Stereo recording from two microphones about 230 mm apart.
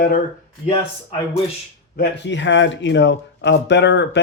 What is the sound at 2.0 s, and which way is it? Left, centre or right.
Speech, left.